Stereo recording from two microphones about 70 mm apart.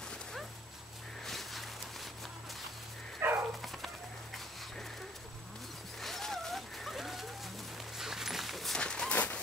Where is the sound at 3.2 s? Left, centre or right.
Right.